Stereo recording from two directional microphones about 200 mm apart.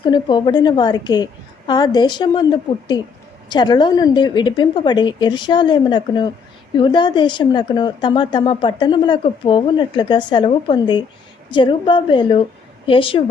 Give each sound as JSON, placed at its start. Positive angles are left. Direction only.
{"t": 0.0, "sound": "speech", "side_deg": 20}